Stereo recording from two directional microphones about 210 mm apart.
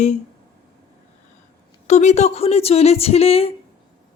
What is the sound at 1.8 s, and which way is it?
Speech, 35° left (ahead or behind).